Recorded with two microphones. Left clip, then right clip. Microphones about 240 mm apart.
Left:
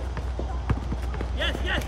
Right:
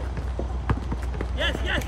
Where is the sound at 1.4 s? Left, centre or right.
Centre.